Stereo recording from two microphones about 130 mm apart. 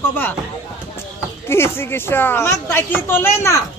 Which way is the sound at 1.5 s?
20° left (ahead or behind).